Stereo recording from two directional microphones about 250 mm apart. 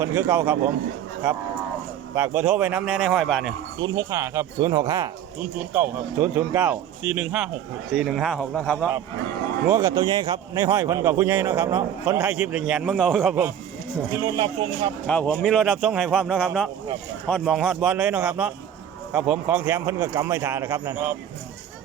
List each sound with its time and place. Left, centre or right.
0.0 s speech: centre
2.1 s speech: centre
3.8 s speech: centre
9.6 s speech: centre
14.3 s speech: centre
15.0 s speech: centre